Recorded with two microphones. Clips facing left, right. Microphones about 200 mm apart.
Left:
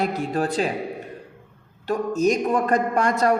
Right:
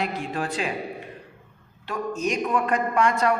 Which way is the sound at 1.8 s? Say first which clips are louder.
Left 6 dB; 40° left (ahead or behind).